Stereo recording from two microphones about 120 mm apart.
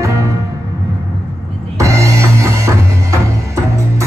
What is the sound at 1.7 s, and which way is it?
Music, 25° right (ahead or behind).